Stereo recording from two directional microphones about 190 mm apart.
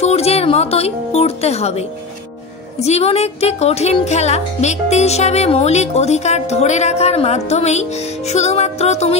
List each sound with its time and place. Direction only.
0.0 s speech: 35° left (ahead or behind)